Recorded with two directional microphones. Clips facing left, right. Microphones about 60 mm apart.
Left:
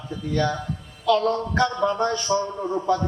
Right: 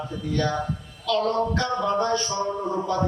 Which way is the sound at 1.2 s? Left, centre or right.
Right.